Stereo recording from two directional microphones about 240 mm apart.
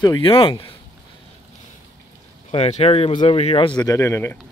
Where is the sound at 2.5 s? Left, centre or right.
Left.